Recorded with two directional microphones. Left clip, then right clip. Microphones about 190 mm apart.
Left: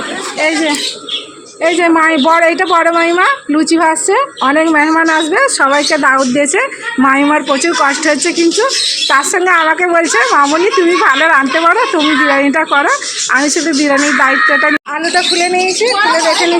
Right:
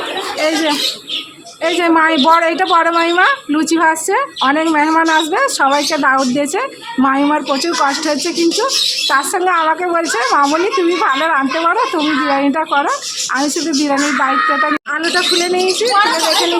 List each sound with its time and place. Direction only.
1.6 s a woman's voice: 5° left (ahead or behind)